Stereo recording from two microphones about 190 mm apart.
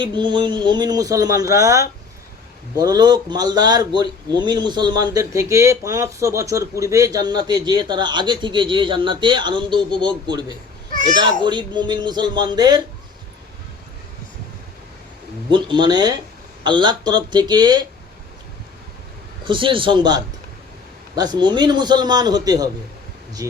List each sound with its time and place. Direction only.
0.0 s speech: 25° right (ahead or behind)
15.4 s speech: 25° right (ahead or behind)
19.5 s speech: 25° right (ahead or behind)